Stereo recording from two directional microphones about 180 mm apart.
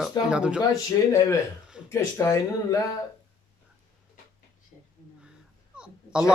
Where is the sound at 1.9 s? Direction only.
15° left (ahead or behind).